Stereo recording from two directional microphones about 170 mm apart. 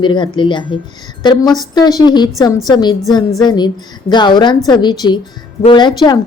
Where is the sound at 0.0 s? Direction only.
25° left (ahead or behind).